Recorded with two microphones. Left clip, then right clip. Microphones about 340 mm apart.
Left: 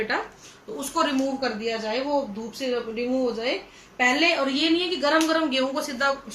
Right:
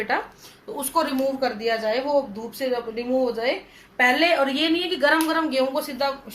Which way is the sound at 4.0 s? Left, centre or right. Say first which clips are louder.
Right 3 dB; right.